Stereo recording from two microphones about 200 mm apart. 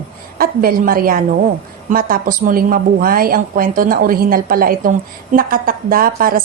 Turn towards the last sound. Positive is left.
turn(degrees=-45)  # may be behind; listen again after turning